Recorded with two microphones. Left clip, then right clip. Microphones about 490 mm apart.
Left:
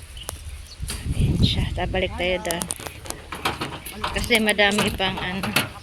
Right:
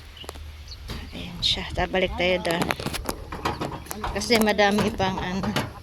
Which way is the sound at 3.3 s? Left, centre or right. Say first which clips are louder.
Left 3 dB; right.